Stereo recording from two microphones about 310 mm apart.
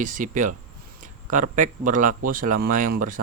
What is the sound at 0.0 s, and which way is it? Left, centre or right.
Speech, right.